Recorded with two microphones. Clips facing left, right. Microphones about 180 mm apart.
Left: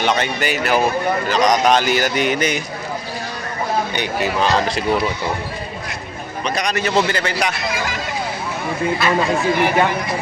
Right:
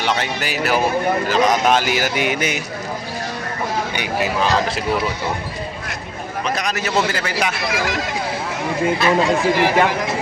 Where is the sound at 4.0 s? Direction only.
5° right (ahead or behind).